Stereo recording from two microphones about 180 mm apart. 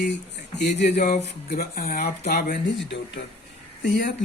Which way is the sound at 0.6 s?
65° left (ahead or behind).